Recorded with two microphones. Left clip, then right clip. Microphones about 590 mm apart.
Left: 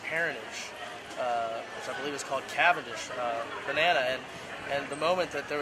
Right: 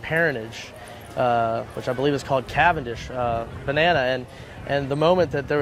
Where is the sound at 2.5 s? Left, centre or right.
Right.